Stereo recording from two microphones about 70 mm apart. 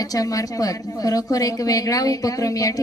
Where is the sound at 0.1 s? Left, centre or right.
Left.